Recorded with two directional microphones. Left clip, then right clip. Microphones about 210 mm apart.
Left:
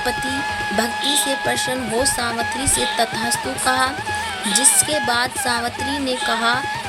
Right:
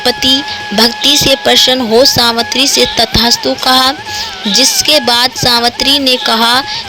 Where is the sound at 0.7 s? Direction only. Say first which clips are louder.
Right 13 dB; 30° right (ahead or behind).